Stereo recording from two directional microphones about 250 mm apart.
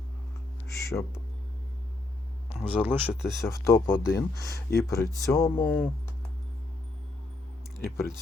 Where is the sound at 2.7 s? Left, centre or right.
Centre.